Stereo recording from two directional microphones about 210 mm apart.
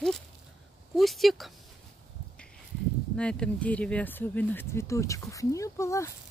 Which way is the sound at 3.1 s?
5° left (ahead or behind).